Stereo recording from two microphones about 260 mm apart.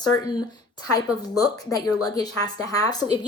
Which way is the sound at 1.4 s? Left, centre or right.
Centre.